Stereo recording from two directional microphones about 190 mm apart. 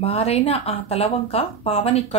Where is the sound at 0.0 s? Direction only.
30° left (ahead or behind).